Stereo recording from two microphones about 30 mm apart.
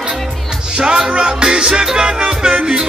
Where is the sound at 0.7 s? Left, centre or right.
Right.